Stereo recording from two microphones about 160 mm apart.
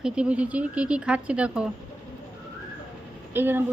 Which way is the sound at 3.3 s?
15° right (ahead or behind).